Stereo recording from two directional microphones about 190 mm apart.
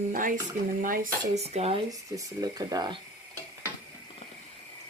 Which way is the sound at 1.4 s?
35° right (ahead or behind).